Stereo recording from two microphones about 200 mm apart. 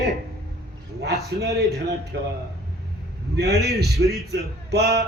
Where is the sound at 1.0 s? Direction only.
55° right (ahead or behind).